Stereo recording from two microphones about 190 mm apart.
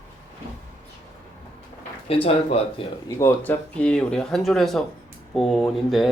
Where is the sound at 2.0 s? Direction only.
30° left (ahead or behind).